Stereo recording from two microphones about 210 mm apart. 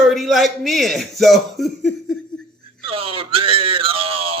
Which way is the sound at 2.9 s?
25° right (ahead or behind).